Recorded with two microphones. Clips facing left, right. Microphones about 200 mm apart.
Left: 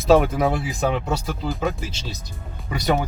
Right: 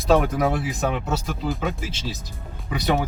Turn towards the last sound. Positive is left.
turn(degrees=0)  # may be behind; listen again after turning